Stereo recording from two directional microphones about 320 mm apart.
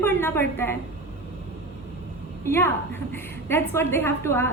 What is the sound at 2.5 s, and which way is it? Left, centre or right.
A woman's voice, centre.